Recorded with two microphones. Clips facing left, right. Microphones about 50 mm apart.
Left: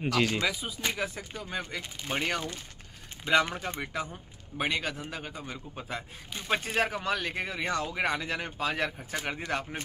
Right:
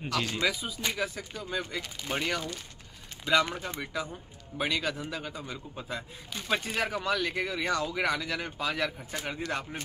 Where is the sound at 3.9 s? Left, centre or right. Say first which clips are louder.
Even; left.